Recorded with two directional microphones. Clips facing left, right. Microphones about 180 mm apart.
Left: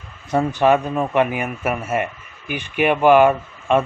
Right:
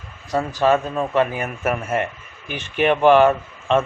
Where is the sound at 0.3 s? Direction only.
20° left (ahead or behind).